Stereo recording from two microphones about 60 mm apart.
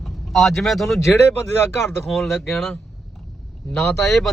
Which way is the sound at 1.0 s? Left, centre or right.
Left.